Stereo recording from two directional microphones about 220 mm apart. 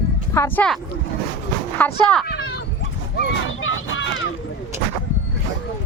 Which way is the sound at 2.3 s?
50° left (ahead or behind).